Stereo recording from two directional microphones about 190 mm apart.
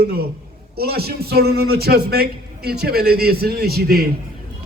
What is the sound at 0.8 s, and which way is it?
A man's voice, 55° right (ahead or behind).